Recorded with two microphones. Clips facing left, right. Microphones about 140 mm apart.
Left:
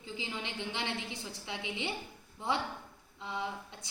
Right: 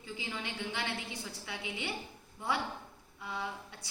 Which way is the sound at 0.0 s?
20° left (ahead or behind).